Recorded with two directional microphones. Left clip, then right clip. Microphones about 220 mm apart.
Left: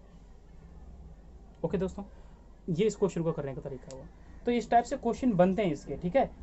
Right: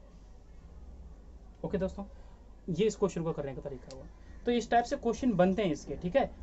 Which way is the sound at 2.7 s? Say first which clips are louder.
Left 1 dB; 15° left (ahead or behind).